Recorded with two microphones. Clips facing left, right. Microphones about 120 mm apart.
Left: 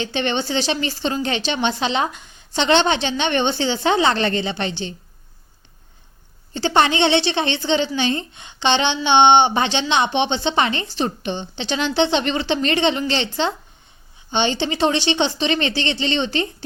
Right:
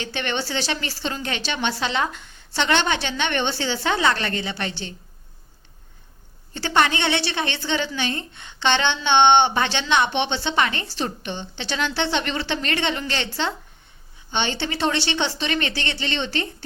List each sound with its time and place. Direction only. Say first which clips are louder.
0.0 s a woman's voice: left 5 dB; 20° left (ahead or behind)
6.5 s a woman's voice: left 3 dB; 20° left (ahead or behind)